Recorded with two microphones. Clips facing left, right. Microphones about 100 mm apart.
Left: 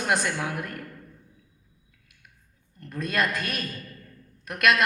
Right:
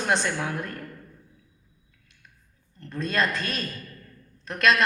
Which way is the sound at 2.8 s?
30° right (ahead or behind).